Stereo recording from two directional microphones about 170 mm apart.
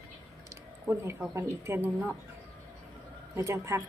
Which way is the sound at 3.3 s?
15° right (ahead or behind).